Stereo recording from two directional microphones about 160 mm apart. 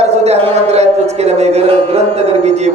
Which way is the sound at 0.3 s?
40° right (ahead or behind).